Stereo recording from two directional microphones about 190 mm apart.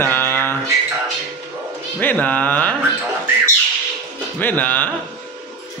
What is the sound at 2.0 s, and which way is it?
Music, 10° left (ahead or behind).